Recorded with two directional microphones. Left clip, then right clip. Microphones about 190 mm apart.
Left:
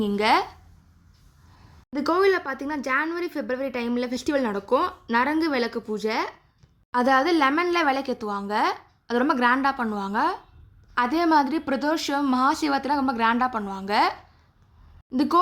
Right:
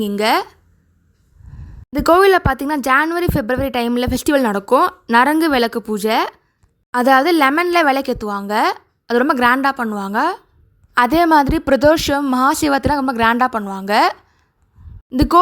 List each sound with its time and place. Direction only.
0.2 s speech: 30° right (ahead or behind)
1.9 s speech: 40° right (ahead or behind)